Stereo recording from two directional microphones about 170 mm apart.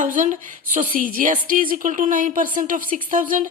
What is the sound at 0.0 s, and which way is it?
A woman's voice, 50° right (ahead or behind).